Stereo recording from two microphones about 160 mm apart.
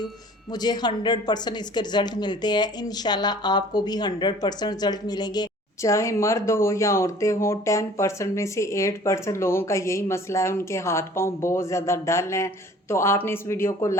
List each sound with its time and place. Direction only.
0.5 s speech: 25° left (ahead or behind)